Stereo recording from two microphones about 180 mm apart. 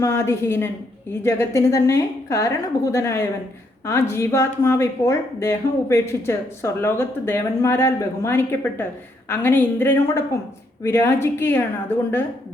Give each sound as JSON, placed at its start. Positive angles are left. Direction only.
{"t": 0.0, "sound": "a woman's voice", "side_deg": 15}